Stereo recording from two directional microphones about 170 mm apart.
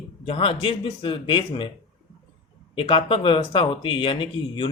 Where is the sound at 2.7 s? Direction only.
35° left (ahead or behind).